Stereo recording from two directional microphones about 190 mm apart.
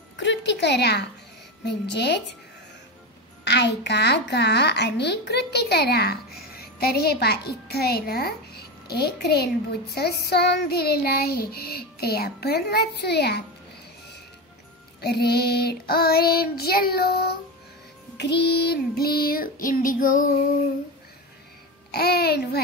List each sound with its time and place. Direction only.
0.2 s a woman's voice: 70° left (ahead or behind)
3.4 s a child's voice: 65° left (ahead or behind)
15.0 s a child's voice: 60° left (ahead or behind)
18.1 s child singing: 65° left (ahead or behind); by 20.2 s 45° left (ahead or behind)
21.9 s a child's voice: 55° left (ahead or behind)